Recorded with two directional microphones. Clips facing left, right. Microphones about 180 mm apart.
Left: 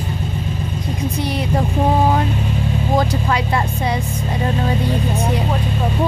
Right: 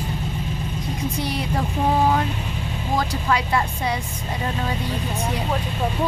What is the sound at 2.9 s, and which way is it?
Speech, 25° left (ahead or behind).